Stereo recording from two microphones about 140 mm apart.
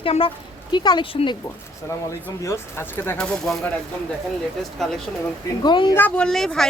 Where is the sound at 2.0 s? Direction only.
20° left (ahead or behind).